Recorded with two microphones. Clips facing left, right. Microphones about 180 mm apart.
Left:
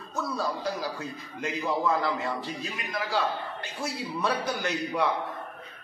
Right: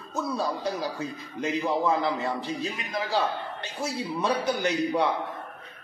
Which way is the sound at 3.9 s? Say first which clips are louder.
Right 2 dB; 20° right (ahead or behind).